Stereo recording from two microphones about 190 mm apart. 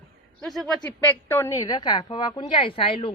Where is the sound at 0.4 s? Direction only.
Centre (ahead or behind).